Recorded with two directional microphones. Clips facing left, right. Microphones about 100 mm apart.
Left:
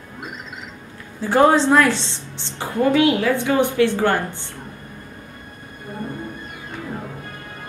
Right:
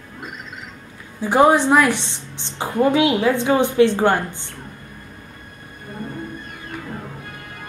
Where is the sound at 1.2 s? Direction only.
15° right (ahead or behind).